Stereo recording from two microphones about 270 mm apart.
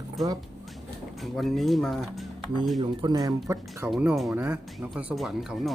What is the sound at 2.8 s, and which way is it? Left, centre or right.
Speech, centre.